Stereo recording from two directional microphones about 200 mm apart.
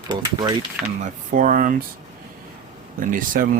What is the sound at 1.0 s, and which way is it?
Speech, 40° right (ahead or behind).